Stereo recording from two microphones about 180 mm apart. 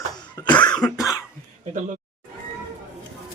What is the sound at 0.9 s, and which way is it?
Cough, 20° left (ahead or behind).